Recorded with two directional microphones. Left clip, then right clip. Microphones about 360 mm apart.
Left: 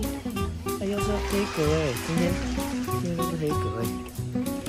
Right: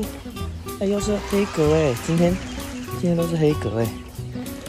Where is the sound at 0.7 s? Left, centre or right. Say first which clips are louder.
Right 5 dB; centre.